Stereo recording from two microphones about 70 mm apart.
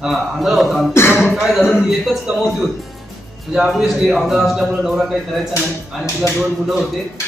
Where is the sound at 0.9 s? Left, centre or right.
Left.